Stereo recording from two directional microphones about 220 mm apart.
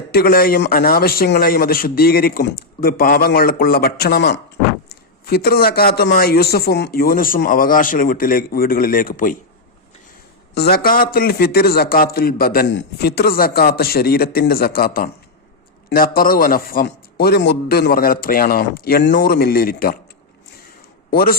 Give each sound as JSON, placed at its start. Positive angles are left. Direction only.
{"t": 0.1, "sound": "a man's voice", "side_deg": 45}
{"t": 10.5, "sound": "a man's voice", "side_deg": 45}
{"t": 21.1, "sound": "a man's voice", "side_deg": 40}